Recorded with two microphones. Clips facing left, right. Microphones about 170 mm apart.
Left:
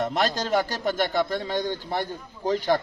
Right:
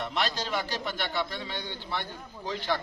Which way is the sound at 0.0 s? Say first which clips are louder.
Left 6 dB; 45° left (ahead or behind).